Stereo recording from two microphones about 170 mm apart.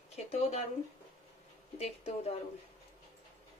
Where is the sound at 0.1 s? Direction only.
40° left (ahead or behind).